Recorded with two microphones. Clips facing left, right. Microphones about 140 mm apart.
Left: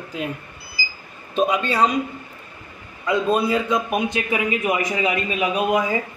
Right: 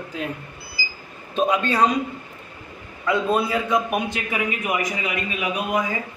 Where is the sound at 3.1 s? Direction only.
20° left (ahead or behind).